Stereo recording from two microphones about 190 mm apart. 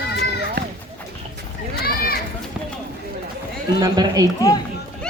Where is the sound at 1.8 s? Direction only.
55° left (ahead or behind).